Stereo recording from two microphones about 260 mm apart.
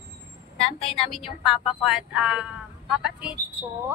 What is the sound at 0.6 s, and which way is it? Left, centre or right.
Speech, left.